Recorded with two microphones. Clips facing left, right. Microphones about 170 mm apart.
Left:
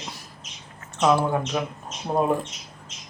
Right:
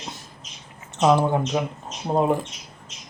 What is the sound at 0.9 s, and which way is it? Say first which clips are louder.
Speech: right 2 dB; 15° right (ahead or behind).